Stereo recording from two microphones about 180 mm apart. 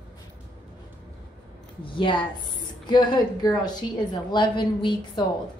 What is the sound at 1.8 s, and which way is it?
A woman's voice, 30° left (ahead or behind).